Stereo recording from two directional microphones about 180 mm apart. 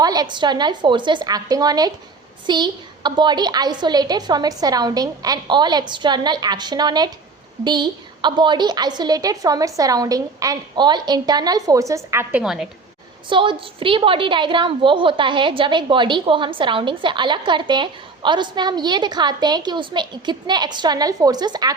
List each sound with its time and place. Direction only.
0.0 s a woman's voice: 20° right (ahead or behind); by 12.6 s 5° right (ahead or behind)
13.3 s a woman's voice: 25° right (ahead or behind)